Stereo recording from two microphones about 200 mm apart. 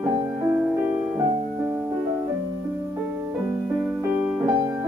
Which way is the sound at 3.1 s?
10° right (ahead or behind).